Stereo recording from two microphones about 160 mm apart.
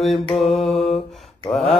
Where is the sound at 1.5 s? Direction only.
30° left (ahead or behind).